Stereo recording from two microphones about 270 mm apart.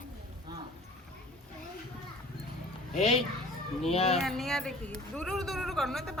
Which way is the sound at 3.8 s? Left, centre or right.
Left.